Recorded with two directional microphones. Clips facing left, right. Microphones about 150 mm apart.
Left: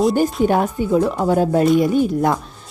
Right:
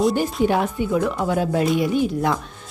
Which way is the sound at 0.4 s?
45° left (ahead or behind).